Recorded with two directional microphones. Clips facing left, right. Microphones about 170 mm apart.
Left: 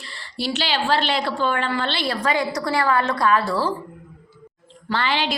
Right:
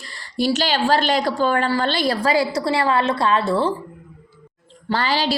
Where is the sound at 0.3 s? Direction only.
45° right (ahead or behind); by 3.7 s 25° right (ahead or behind).